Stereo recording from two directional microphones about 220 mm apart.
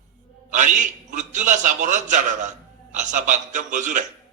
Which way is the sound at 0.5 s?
35° right (ahead or behind).